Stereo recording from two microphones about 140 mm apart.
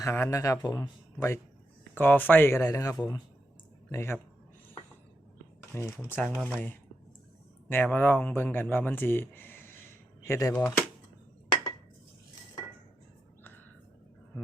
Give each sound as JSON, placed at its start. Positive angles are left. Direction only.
{"t": 0.0, "sound": "speech", "side_deg": 20}
{"t": 1.8, "sound": "speech", "side_deg": 10}
{"t": 5.7, "sound": "speech", "side_deg": 15}
{"t": 6.2, "sound": "speech", "side_deg": 0}